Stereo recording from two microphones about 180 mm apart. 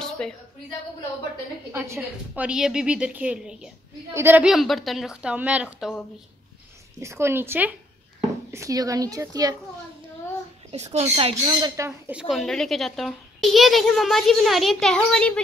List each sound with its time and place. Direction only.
0.0 s a sound: 5° left (ahead or behind)
1.7 s a woman's voice: 10° right (ahead or behind)
7.0 s a woman's voice: 15° right (ahead or behind)
10.7 s speech: 35° right (ahead or behind); by 12.2 s 15° right (ahead or behind)
12.2 s a child's voice: centre (ahead or behind)